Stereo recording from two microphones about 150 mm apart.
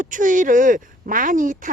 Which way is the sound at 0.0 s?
60° right (ahead or behind).